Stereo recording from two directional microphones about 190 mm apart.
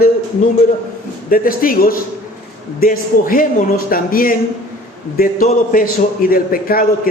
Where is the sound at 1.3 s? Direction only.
50° left (ahead or behind).